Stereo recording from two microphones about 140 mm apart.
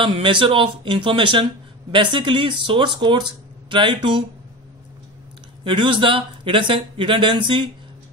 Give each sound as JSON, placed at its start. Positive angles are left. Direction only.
{"t": 0.0, "sound": "speech", "side_deg": -35}
{"t": 5.6, "sound": "speech", "side_deg": -35}